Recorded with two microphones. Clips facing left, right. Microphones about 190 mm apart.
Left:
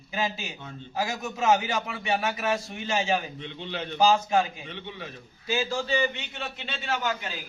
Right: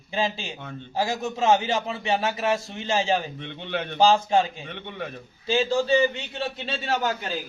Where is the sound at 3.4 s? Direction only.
60° right (ahead or behind).